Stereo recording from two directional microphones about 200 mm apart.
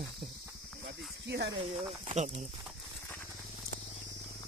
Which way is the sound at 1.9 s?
35° right (ahead or behind).